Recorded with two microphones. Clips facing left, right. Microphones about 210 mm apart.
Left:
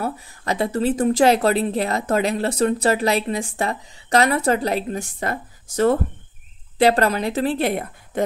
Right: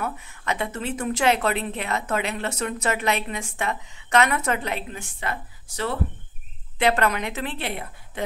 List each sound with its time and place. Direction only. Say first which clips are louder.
0.0 s a woman's voice: left 4 dB; 35° left (ahead or behind)
6.8 s a woman's voice: left 5 dB; 35° left (ahead or behind)